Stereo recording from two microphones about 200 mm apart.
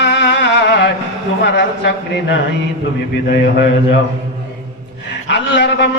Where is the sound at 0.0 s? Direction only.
60° left (ahead or behind).